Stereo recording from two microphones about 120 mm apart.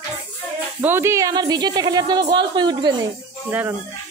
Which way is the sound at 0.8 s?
20° right (ahead or behind).